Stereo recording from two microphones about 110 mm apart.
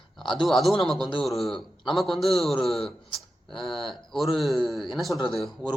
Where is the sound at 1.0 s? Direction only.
50° left (ahead or behind).